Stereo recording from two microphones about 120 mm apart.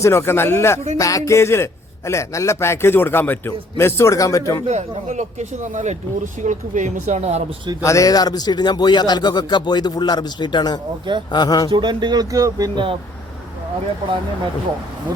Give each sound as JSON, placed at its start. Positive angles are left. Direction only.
{"t": 0.0, "sound": "a man's voice", "side_deg": 20}
{"t": 4.7, "sound": "speech", "side_deg": -75}
{"t": 6.4, "sound": "speech", "side_deg": -90}
{"t": 7.8, "sound": "speech", "side_deg": 25}
{"t": 11.7, "sound": "speech", "side_deg": -40}